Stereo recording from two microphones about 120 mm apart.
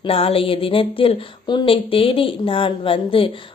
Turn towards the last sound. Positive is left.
turn(degrees=50)  # may be behind; listen again after turning